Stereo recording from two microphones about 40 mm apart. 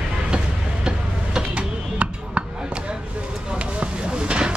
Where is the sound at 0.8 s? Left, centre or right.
Right.